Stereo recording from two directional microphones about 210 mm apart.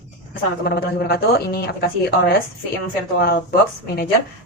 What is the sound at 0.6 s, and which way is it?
Speech, 45° left (ahead or behind).